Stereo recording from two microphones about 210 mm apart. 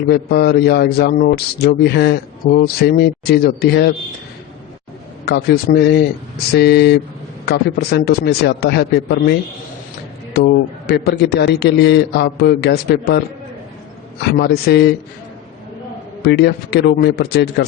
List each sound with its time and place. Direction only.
0.1 s a man's voice: 50° left (ahead or behind)
5.2 s a man's voice: 50° left (ahead or behind)
10.3 s a man's voice: 55° left (ahead or behind)
16.2 s a man's voice: 50° left (ahead or behind)